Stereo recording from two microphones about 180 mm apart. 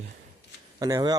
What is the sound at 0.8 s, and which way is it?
Speech, 20° right (ahead or behind).